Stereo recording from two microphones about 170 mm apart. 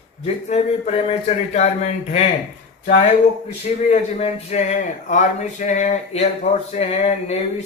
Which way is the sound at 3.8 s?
40° left (ahead or behind).